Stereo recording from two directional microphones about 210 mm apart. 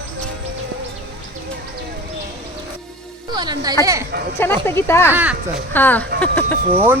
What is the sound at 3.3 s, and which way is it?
Music, 20° right (ahead or behind).